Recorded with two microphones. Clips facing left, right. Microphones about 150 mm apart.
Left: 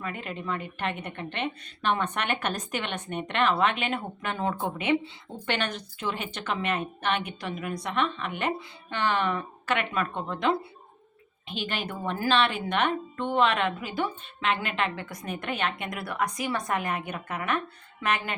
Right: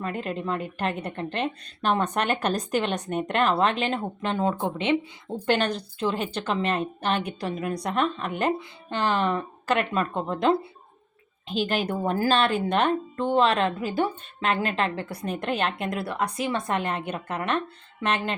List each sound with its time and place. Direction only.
0.0 s a woman's voice: 35° right (ahead or behind)
5.5 s a woman's voice: 35° right (ahead or behind)